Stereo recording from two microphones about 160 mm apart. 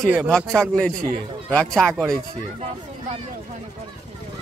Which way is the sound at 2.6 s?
40° right (ahead or behind).